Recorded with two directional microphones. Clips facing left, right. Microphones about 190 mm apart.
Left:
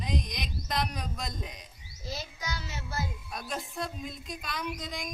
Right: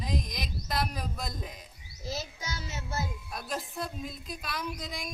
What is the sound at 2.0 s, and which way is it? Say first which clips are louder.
Child singing: right 1 dB; 25° right (ahead or behind).